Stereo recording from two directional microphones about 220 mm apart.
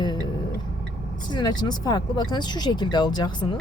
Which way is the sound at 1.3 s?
20° left (ahead or behind).